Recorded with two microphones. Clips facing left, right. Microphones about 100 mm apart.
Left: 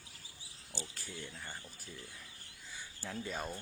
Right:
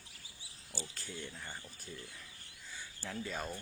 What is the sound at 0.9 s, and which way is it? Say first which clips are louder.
Speech: right 1 dB; 15° left (ahead or behind).